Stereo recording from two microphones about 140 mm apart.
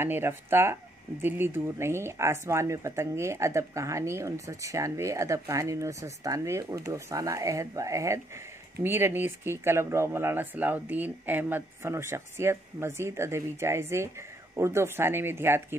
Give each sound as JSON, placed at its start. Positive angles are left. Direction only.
{"t": 0.0, "sound": "speech", "side_deg": -15}